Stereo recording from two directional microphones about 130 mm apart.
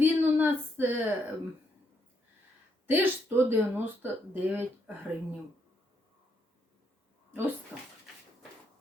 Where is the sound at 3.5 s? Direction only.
15° right (ahead or behind).